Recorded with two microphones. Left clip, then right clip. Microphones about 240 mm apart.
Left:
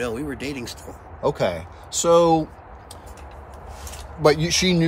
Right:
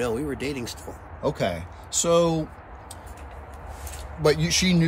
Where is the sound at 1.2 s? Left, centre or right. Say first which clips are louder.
Left 4 dB; centre.